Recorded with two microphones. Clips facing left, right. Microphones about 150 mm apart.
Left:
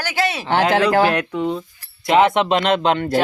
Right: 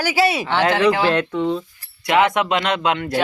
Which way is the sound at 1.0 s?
10° left (ahead or behind).